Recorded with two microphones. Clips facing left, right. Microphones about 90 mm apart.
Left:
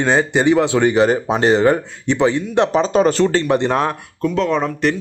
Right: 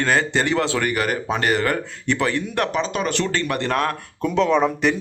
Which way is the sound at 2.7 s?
35° left (ahead or behind).